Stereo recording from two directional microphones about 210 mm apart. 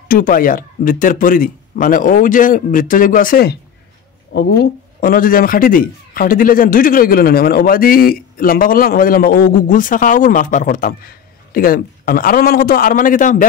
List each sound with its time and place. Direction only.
0.1 s speech: 40° left (ahead or behind)
5.0 s a man's voice: 40° left (ahead or behind)